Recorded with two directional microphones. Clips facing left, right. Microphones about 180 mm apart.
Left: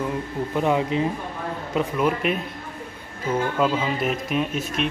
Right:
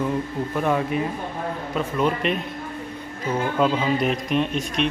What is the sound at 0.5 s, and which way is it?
Speech, 15° left (ahead or behind).